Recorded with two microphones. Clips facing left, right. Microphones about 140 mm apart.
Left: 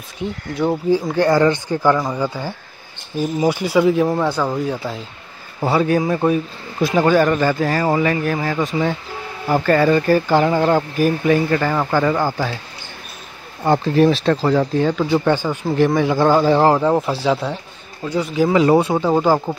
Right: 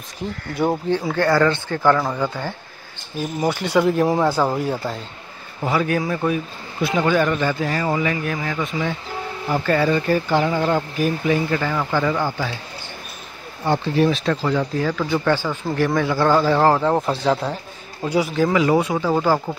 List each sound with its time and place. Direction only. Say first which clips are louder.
1.1 s speech: left 1 dB; 20° left (ahead or behind); by 4.9 s centre (ahead or behind)
5.6 s speech: left 4 dB; 30° left (ahead or behind)
9.5 s speech: left 4 dB; 50° left (ahead or behind)
13.7 s speech: left 4 dB; 40° left (ahead or behind)
14.8 s speech: left 4 dB; 25° left (ahead or behind)
16.9 s speech: left 2 dB; centre (ahead or behind)
18.0 s speech: right 1 dB; 30° right (ahead or behind)
18.5 s speech: left 7 dB; 30° left (ahead or behind)